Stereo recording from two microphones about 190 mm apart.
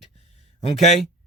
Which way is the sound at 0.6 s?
35° left (ahead or behind).